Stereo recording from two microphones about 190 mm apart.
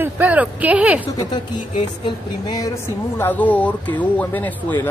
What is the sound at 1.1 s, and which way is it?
Speech, 25° left (ahead or behind).